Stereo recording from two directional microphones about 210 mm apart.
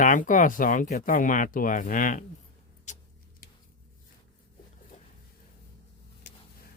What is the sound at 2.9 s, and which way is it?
Tick-tock, 35° left (ahead or behind).